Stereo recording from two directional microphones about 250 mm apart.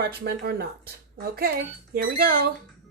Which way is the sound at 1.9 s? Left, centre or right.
Right.